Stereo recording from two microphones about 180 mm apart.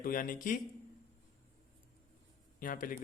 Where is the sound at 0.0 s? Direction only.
50° left (ahead or behind).